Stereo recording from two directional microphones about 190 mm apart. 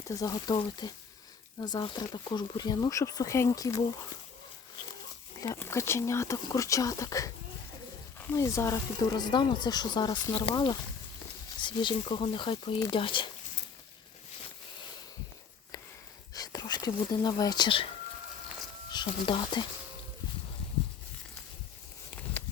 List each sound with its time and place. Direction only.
0.1 s speech: 20° left (ahead or behind)
5.4 s speech: 15° left (ahead or behind)
16.3 s speech: 20° left (ahead or behind)
18.9 s speech: 25° left (ahead or behind)